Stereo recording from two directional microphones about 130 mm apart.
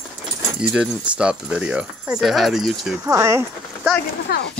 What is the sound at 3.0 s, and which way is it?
Speech, 25° right (ahead or behind).